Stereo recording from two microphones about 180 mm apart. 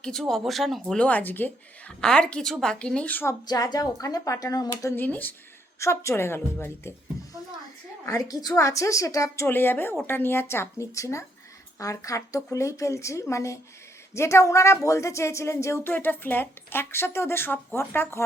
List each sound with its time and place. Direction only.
0.0 s speech: centre (ahead or behind)
3.4 s speech: 20° left (ahead or behind)
8.0 s speech: 20° left (ahead or behind)